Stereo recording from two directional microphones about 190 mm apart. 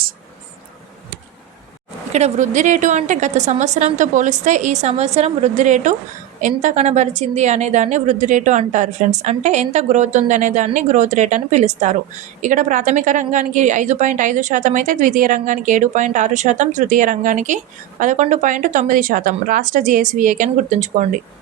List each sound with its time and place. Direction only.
2.1 s a woman's voice: 40° right (ahead or behind)